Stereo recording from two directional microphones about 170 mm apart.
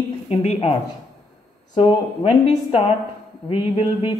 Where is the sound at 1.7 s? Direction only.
30° left (ahead or behind).